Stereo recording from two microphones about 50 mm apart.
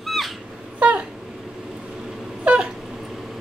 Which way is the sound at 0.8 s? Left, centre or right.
Right.